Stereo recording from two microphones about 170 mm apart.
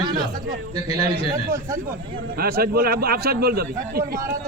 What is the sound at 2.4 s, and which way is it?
A man's voice, 60° right (ahead or behind).